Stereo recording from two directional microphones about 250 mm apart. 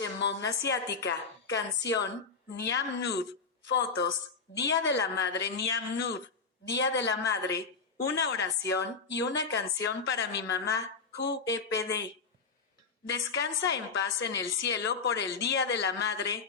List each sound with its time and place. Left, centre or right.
0.0 s a sound: left
0.7 s a woman's voice: left
13.1 s a woman's voice: left